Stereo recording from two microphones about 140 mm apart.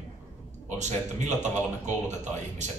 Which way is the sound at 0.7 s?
55° right (ahead or behind).